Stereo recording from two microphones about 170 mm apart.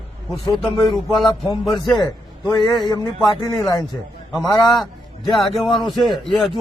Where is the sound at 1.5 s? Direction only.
20° left (ahead or behind).